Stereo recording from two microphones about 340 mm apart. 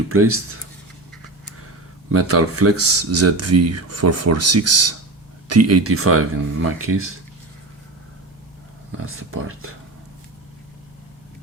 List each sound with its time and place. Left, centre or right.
0.1 s speech: right
2.1 s speech: right
9.0 s speech: right